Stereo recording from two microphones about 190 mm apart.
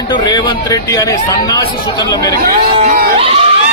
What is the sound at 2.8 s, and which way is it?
Speech, 50° right (ahead or behind).